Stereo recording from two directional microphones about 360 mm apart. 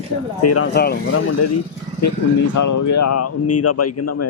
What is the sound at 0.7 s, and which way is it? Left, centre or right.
Speech, left.